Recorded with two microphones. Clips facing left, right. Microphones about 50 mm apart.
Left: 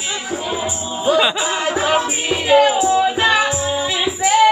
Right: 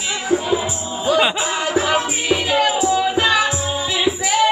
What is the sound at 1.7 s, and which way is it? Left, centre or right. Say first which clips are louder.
Music: left 1 dB; centre.